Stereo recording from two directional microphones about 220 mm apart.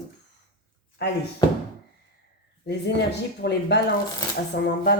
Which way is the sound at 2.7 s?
50° left (ahead or behind).